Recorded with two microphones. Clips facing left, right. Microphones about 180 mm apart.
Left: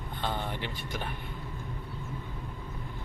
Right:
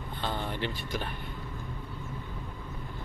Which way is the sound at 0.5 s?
15° left (ahead or behind).